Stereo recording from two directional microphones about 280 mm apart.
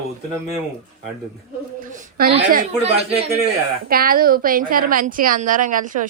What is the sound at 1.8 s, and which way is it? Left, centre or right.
Speech, right.